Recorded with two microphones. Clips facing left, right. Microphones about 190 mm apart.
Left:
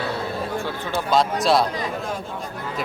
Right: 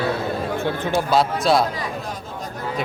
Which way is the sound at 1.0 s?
Centre (ahead or behind).